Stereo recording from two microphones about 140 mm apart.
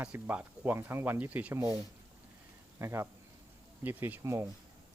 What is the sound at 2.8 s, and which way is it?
Speech, 20° right (ahead or behind).